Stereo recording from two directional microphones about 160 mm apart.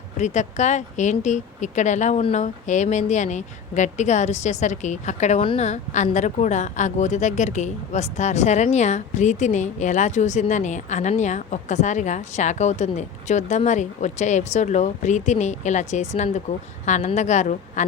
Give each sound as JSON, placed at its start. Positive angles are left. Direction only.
{"t": 0.2, "sound": "a woman's voice", "side_deg": 50}